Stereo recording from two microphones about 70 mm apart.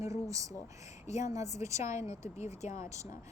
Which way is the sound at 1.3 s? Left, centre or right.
Right.